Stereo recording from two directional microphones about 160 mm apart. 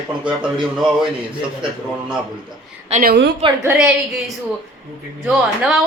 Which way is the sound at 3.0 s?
90° right.